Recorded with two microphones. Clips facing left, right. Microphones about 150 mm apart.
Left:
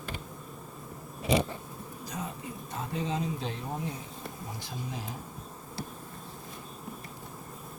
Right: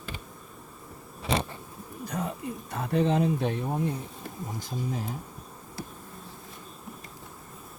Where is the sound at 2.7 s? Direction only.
65° right (ahead or behind).